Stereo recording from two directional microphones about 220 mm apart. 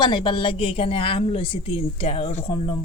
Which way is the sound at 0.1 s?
20° left (ahead or behind).